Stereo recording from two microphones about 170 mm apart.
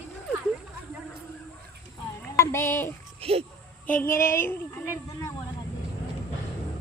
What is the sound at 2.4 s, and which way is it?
Speech, 15° left (ahead or behind).